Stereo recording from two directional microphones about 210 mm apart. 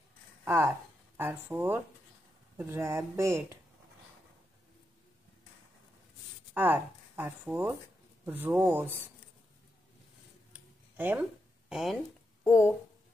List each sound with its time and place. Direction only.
0.5 s speech: 10° right (ahead or behind)
6.5 s speech: 10° right (ahead or behind)
10.5 s a sound: 10° right (ahead or behind)
11.7 s speech: centre (ahead or behind)
12.4 s speech: 15° left (ahead or behind)